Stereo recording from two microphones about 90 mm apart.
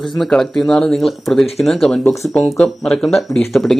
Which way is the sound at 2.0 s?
35° left (ahead or behind).